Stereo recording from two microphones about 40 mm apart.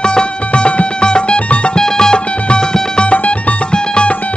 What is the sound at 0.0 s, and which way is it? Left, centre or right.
Music, left.